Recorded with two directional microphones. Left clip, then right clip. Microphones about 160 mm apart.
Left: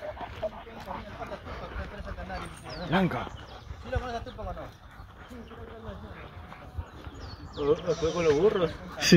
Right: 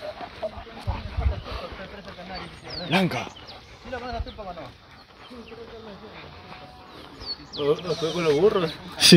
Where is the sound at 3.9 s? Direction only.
90° left.